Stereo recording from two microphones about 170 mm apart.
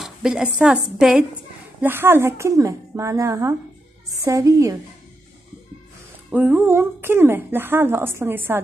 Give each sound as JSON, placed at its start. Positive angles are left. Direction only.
{"t": 0.0, "sound": "a woman's voice", "side_deg": -5}
{"t": 6.3, "sound": "speech", "side_deg": -10}